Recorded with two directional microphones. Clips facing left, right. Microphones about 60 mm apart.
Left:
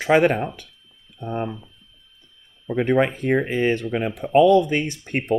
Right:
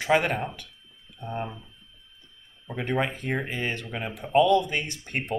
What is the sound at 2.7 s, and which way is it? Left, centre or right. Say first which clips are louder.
Speech: left 8 dB; left.